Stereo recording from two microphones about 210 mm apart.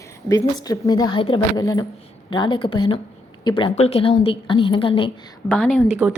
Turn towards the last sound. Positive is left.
turn(degrees=-5)  # may be behind; listen again after turning